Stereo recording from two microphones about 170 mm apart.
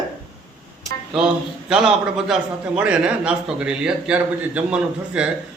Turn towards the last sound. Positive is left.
turn(degrees=-5)  # may be behind; listen again after turning